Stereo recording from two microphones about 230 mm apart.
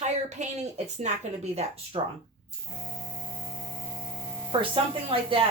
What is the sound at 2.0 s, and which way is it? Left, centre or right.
Speech, right.